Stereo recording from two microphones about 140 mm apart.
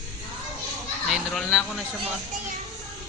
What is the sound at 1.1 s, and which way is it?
Speech, centre (ahead or behind).